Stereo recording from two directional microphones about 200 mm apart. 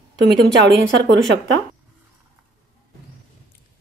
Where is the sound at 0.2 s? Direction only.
60° right (ahead or behind).